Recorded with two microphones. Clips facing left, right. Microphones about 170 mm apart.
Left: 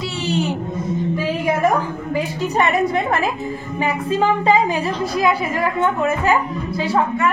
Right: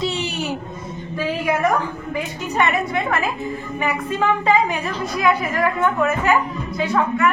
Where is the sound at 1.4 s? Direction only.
30° left (ahead or behind).